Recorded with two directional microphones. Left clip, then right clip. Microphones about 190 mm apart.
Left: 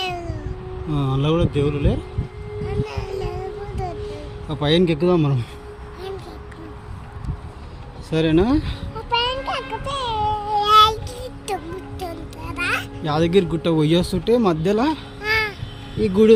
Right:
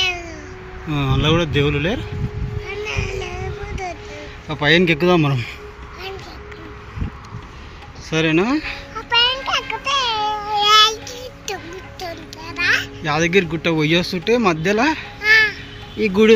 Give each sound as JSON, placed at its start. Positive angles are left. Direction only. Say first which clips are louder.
{"t": 0.9, "sound": "speech", "louder": "right 3 dB", "side_deg": 5}
{"t": 2.6, "sound": "child singing", "louder": "right 4 dB", "side_deg": 35}
{"t": 4.4, "sound": "speech", "louder": "right 4 dB", "side_deg": 5}
{"t": 8.1, "sound": "speech", "louder": "right 1 dB", "side_deg": 10}
{"t": 9.1, "sound": "a sound", "louder": "right 5 dB", "side_deg": 5}
{"t": 10.7, "sound": "child singing", "louder": "even", "side_deg": 45}
{"t": 12.0, "sound": "music", "louder": "right 3 dB", "side_deg": 50}
{"t": 13.0, "sound": "speech", "louder": "right 2 dB", "side_deg": 15}
{"t": 15.2, "sound": "a sound", "louder": "right 8 dB", "side_deg": 50}
{"t": 16.0, "sound": "speech", "louder": "right 1 dB", "side_deg": 5}